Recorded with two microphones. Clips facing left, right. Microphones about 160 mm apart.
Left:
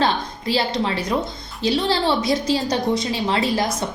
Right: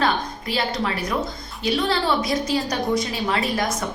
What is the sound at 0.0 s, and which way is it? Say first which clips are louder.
A woman's voice: left 2 dB; 30° left (ahead or behind).